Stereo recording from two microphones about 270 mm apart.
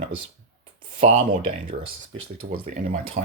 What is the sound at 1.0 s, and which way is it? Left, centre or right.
Speech, right.